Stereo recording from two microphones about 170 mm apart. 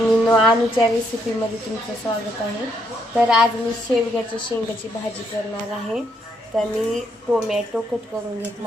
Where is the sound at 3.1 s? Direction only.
5° right (ahead or behind).